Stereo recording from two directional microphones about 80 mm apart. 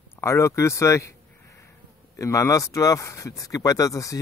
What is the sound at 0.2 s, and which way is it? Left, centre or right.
Speech, left.